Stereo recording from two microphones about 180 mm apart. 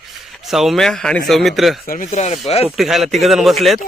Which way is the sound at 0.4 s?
Centre (ahead or behind).